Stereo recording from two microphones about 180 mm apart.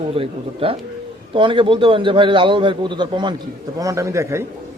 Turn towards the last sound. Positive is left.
turn(degrees=-15)  # may be behind; listen again after turning